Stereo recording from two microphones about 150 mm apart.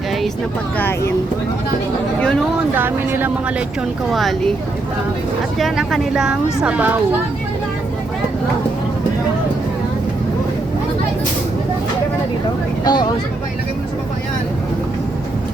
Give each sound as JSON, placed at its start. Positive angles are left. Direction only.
{"t": 0.8, "sound": "speech", "side_deg": 15}
{"t": 2.7, "sound": "speech", "side_deg": -15}
{"t": 4.1, "sound": "speech", "side_deg": 0}
{"t": 5.5, "sound": "speech", "side_deg": 0}
{"t": 12.8, "sound": "speech", "side_deg": 30}